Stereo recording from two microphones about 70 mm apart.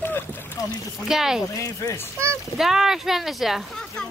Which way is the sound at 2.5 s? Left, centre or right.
Centre.